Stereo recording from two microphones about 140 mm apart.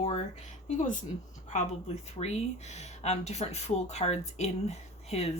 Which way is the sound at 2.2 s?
50° left (ahead or behind).